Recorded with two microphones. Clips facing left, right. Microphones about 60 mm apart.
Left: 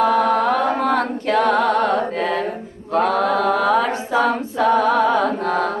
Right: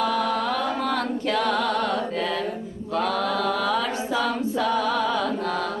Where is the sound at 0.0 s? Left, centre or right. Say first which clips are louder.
Left 7 dB; left.